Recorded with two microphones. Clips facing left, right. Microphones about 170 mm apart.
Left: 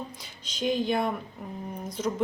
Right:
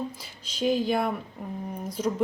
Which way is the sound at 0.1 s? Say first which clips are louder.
Right 1 dB; 5° right (ahead or behind).